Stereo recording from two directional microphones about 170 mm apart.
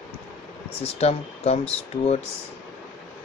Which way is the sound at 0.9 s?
40° left (ahead or behind).